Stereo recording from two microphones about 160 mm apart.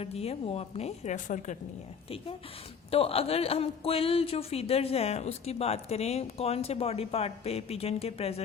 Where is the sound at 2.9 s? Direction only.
35° left (ahead or behind).